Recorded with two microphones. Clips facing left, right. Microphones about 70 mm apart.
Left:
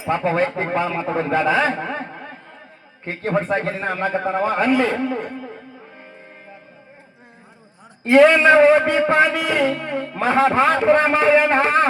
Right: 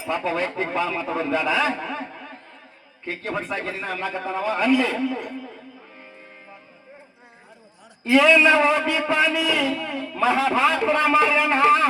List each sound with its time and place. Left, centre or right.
0.0 s a man's voice: left
8.0 s a man's voice: left